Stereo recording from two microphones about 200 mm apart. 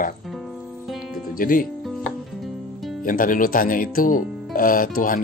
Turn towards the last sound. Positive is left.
turn(degrees=45)  # may be behind; listen again after turning